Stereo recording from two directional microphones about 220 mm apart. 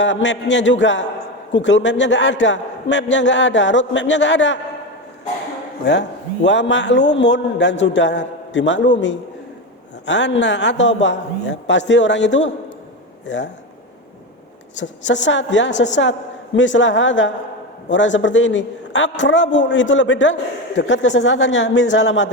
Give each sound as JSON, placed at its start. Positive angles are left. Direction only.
{"t": 0.0, "sound": "a man's voice", "side_deg": 55}
{"t": 5.8, "sound": "a man's voice", "side_deg": 55}
{"t": 14.8, "sound": "a man's voice", "side_deg": 55}